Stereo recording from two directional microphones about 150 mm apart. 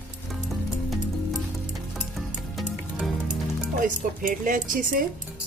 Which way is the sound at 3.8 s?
65° right (ahead or behind).